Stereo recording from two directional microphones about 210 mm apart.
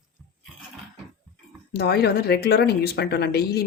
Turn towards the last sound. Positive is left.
turn(degrees=50)  # may be behind; listen again after turning